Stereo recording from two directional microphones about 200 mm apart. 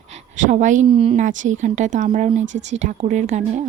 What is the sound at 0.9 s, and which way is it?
Speech, 30° right (ahead or behind).